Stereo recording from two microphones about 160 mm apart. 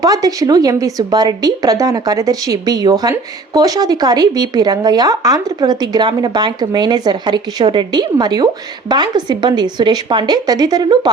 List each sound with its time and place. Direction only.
0.0 s a woman's voice: 20° right (ahead or behind)